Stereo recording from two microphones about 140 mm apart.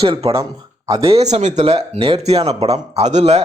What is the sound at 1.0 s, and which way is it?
Speech, 45° right (ahead or behind).